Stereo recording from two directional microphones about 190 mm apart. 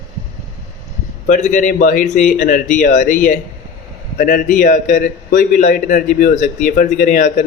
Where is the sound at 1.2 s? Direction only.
40° left (ahead or behind).